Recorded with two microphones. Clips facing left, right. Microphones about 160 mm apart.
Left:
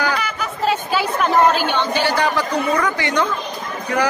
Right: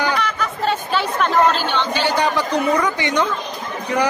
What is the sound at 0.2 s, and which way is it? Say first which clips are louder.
Chatter: right 1 dB; 5° left (ahead or behind).